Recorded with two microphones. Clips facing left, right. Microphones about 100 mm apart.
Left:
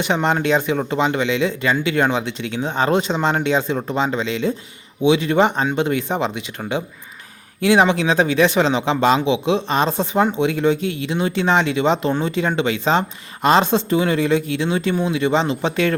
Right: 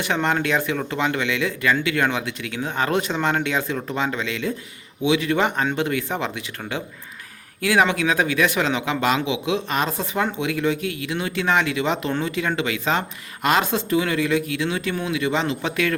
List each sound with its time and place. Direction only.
0.0 s speech: 20° left (ahead or behind)